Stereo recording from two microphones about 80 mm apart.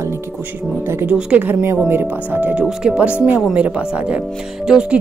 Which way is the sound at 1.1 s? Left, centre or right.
Centre.